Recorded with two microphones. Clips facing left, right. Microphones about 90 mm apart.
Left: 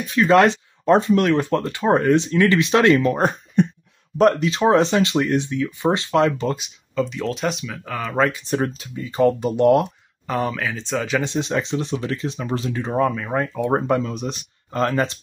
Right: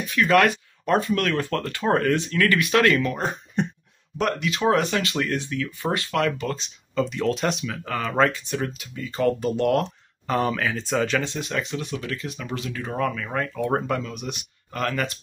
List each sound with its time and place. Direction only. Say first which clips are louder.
0.1 s speech: left 4 dB; 25° left (ahead or behind)
4.2 s speech: left 7 dB; 35° left (ahead or behind)
6.5 s speech: left 2 dB; 5° left (ahead or behind)
8.5 s speech: left 6 dB; 35° left (ahead or behind)
10.2 s speech: even; centre (ahead or behind)
11.1 s speech: left 4 dB; 20° left (ahead or behind)